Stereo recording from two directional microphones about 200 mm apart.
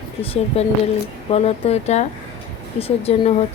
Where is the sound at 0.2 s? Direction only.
30° left (ahead or behind).